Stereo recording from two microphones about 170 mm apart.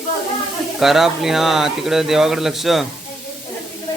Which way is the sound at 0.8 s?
Centre (ahead or behind).